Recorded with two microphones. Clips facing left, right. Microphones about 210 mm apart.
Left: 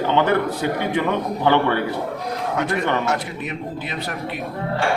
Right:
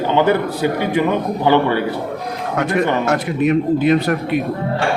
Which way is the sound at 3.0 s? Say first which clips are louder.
Right 8 dB; 55° right (ahead or behind).